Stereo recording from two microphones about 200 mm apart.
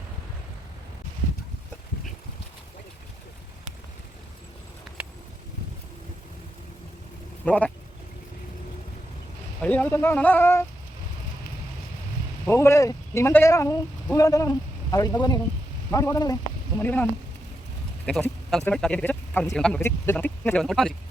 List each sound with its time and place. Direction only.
7.4 s speech: 5° left (ahead or behind)
9.6 s speech: 5° left (ahead or behind)
12.5 s speech: 15° left (ahead or behind)